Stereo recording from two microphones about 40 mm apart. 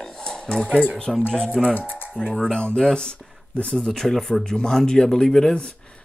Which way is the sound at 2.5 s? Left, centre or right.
Left.